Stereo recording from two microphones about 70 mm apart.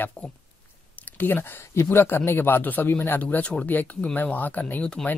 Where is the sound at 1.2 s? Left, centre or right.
Left.